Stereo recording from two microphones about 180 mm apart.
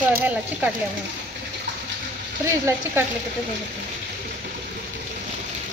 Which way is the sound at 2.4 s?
15° right (ahead or behind).